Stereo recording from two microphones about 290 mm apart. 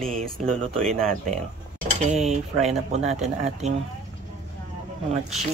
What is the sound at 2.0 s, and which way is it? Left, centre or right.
Speech, right.